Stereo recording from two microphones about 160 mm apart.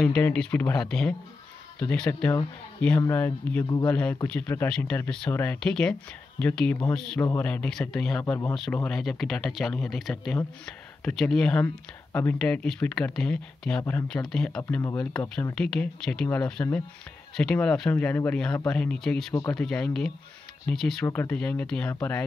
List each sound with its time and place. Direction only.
0.0 s a man's voice: 5° left (ahead or behind)
14.8 s speech: 20° left (ahead or behind)
15.5 s a man's voice: 5° left (ahead or behind)